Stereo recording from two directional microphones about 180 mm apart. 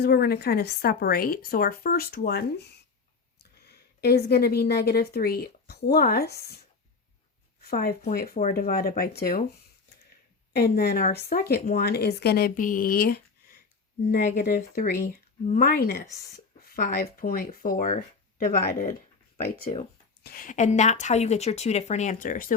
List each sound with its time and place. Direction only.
0.0 s a woman's voice: 60° left (ahead or behind)
7.6 s a woman's voice: 55° left (ahead or behind)
10.5 s a woman's voice: 60° left (ahead or behind)
14.1 s speech: 45° left (ahead or behind)